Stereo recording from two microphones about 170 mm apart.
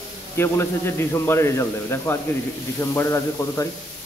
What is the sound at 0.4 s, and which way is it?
A man's voice, 15° left (ahead or behind).